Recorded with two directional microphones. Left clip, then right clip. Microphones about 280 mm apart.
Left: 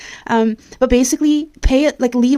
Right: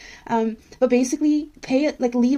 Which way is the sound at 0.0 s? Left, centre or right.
Left.